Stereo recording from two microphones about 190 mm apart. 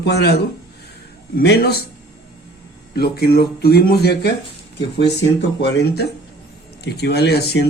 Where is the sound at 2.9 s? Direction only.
55° left (ahead or behind).